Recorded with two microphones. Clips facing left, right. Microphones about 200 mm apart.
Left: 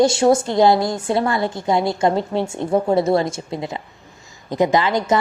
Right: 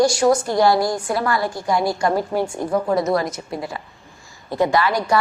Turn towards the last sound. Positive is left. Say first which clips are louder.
# left 2 dB
turn(degrees=20)  # may be behind; listen again after turning